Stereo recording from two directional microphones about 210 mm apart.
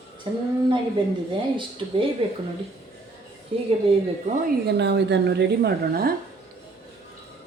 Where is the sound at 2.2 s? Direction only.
25° right (ahead or behind).